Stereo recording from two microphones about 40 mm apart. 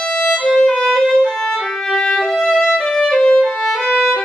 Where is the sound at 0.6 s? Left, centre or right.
Centre.